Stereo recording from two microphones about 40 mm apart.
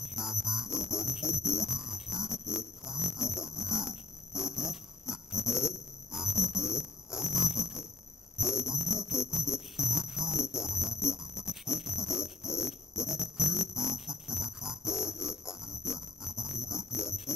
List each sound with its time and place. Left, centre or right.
0.1 s music: centre
7.3 s a sound: centre
8.4 s music: centre